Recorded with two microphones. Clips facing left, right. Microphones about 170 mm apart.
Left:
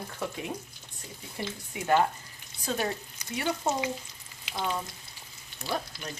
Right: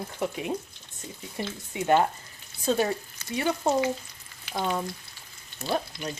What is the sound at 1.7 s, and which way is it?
Speech, 25° right (ahead or behind).